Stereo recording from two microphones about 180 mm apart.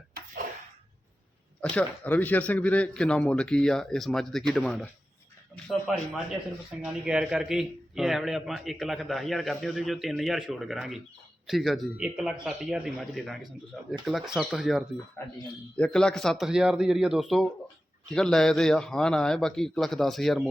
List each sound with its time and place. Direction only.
1.6 s a man's voice: 10° left (ahead or behind)